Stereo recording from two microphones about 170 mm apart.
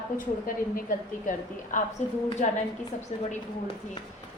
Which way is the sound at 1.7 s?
50° left (ahead or behind).